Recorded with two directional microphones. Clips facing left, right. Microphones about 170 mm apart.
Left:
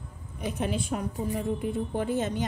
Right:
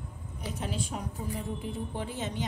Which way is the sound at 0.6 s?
60° left (ahead or behind).